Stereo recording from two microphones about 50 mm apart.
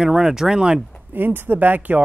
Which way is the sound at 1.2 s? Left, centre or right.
Right.